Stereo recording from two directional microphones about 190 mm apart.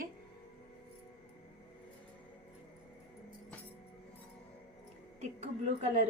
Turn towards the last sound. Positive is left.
turn(degrees=-35)  # may be behind; listen again after turning